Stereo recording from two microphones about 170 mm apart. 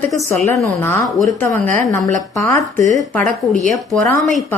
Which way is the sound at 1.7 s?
50° right (ahead or behind).